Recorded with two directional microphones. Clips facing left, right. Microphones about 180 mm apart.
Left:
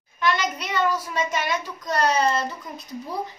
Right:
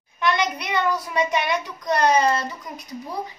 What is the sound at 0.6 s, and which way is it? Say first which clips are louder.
Speech: right 1 dB; 15° right (ahead or behind).